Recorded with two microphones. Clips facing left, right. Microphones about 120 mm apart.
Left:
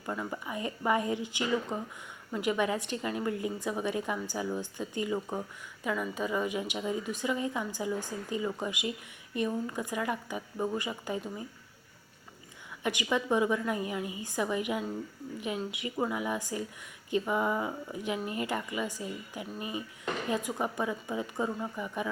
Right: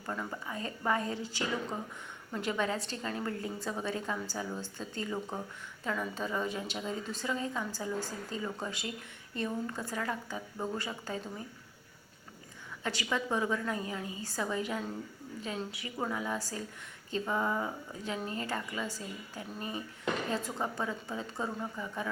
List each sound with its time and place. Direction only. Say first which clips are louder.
0.0 s a woman's voice: left 2 dB; 10° left (ahead or behind)
12.8 s a woman's voice: left 4 dB; 15° left (ahead or behind)